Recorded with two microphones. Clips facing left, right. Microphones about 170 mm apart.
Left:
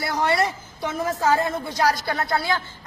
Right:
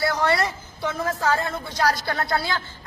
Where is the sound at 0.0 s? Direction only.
20° left (ahead or behind).